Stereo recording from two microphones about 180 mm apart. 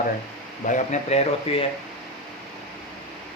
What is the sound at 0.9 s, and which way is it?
Speech, 35° left (ahead or behind).